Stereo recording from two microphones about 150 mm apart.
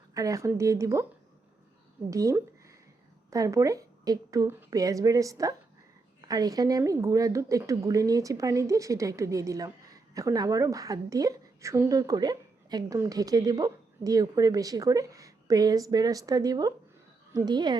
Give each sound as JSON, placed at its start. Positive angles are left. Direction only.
{"t": 0.1, "sound": "a woman's voice", "side_deg": -20}
{"t": 2.0, "sound": "a woman's voice", "side_deg": -20}